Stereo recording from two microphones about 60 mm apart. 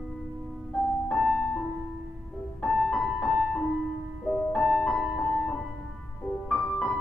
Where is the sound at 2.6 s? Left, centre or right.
Centre.